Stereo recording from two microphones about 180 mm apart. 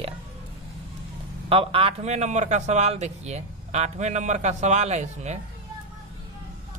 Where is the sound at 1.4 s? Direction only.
30° right (ahead or behind).